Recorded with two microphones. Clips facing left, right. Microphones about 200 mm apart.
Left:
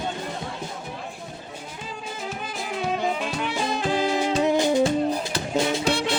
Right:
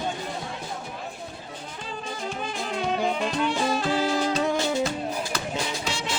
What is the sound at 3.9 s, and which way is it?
Music, 15° left (ahead or behind).